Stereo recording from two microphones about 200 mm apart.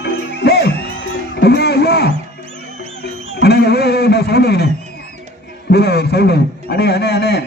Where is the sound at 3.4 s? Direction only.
55° left (ahead or behind).